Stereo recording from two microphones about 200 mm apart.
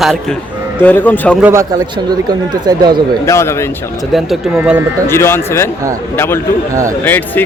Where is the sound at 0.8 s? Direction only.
10° left (ahead or behind).